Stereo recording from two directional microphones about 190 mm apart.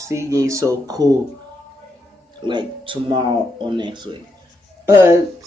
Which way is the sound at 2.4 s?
25° right (ahead or behind).